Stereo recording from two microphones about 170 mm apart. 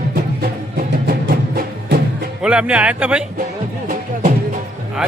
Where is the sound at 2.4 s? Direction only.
5° right (ahead or behind).